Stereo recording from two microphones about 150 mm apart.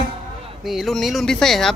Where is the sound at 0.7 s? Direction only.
Centre (ahead or behind).